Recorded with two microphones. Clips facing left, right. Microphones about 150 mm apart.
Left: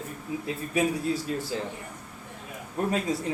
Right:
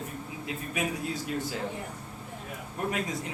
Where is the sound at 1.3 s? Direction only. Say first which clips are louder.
Left 2 dB; 30° left (ahead or behind).